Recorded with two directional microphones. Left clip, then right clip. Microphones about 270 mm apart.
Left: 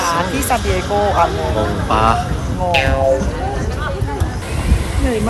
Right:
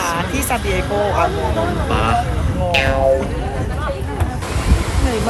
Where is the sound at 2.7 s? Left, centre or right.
Centre.